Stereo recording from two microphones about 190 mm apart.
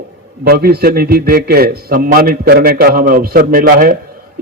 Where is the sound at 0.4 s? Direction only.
55° right (ahead or behind).